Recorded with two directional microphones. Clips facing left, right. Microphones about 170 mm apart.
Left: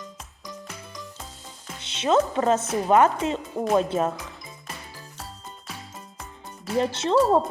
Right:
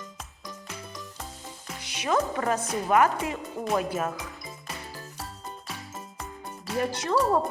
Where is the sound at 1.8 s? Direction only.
25° left (ahead or behind).